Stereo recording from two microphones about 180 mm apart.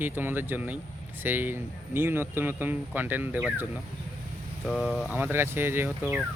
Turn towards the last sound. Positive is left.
turn(degrees=-10)  # may be behind; listen again after turning